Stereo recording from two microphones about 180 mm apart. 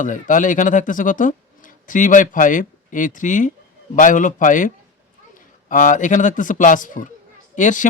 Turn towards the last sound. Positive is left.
turn(degrees=45)  # may be behind; listen again after turning